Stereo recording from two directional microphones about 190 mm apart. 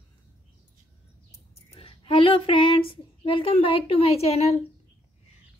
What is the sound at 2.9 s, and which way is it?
A woman's voice, 30° left (ahead or behind).